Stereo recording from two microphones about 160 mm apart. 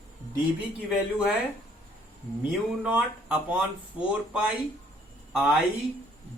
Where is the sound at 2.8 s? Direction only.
5° right (ahead or behind).